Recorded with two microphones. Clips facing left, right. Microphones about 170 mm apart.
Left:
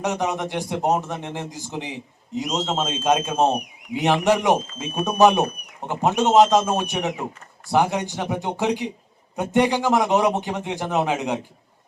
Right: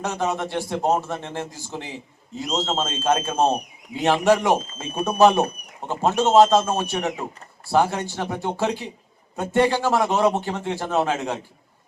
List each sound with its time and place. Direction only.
0.0 s a man's voice: 15° left (ahead or behind)